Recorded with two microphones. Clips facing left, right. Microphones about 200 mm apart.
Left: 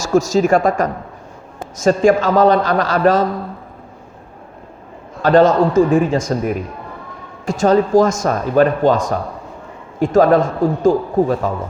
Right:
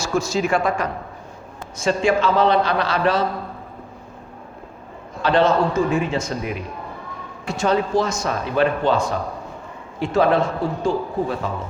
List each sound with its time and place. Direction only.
0.0 s speech: 45° left (ahead or behind)
5.2 s speech: 45° left (ahead or behind)